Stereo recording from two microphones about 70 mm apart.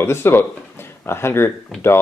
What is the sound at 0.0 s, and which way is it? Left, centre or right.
Speech, left.